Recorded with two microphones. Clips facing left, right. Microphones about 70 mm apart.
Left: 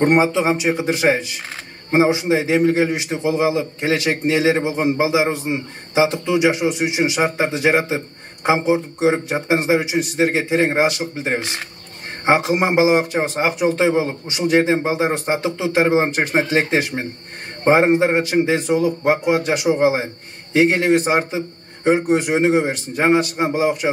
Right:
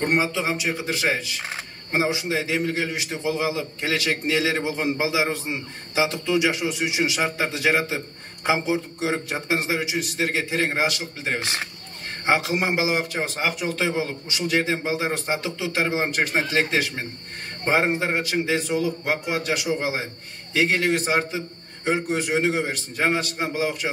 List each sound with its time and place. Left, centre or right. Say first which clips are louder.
0.0 s a man's voice: left 8 dB; left